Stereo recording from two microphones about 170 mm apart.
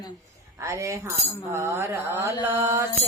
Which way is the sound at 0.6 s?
15° right (ahead or behind).